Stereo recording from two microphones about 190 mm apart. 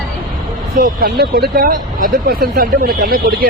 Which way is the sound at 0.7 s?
45° right (ahead or behind).